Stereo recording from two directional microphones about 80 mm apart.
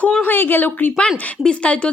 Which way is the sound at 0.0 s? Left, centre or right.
Centre.